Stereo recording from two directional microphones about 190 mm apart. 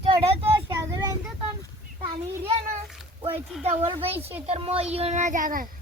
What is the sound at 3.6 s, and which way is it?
A child's voice, 35° right (ahead or behind).